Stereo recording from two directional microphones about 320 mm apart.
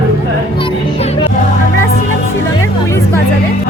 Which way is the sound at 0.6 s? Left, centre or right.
Centre.